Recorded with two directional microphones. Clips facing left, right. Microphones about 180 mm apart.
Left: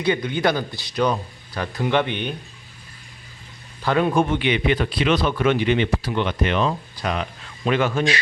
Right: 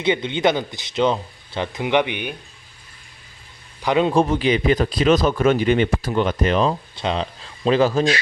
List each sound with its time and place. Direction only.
0.0 s speech: 25° right (ahead or behind)
3.8 s speech: 20° right (ahead or behind)
4.1 s speech: 35° right (ahead or behind)